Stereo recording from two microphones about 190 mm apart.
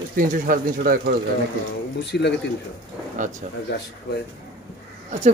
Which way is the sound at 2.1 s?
60° left (ahead or behind).